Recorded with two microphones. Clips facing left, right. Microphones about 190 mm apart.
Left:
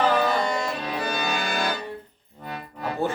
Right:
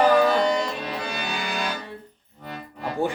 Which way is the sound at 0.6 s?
40° left (ahead or behind).